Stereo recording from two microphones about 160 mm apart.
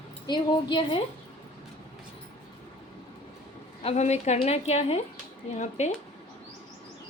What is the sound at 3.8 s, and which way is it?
A woman's voice, 45° left (ahead or behind).